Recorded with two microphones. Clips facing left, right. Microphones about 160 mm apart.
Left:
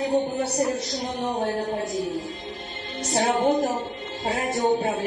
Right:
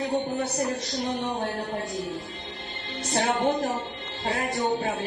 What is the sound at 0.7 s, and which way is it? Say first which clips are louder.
A woman's voice: left 1 dB; 40° left (ahead or behind).